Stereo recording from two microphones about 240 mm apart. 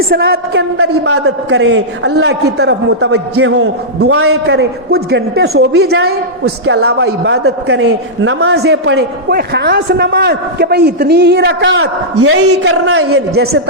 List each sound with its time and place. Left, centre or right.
0.1 s a woman's voice: right
0.8 s a man's voice: right
1.2 s a man's voice: right
3.6 s a man's voice: right
4.4 s a man's voice: right
12.1 s a man's voice: right
13.3 s a woman's voice: right